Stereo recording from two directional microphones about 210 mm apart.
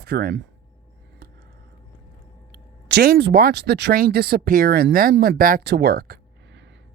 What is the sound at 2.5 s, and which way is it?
Speech, 50° right (ahead or behind).